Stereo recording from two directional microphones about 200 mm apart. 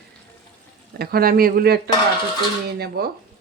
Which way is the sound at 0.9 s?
50° right (ahead or behind).